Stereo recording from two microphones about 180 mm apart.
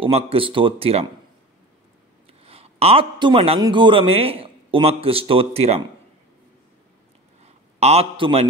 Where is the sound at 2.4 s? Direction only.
35° right (ahead or behind).